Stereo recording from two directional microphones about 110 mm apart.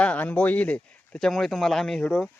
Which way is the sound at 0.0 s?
10° left (ahead or behind).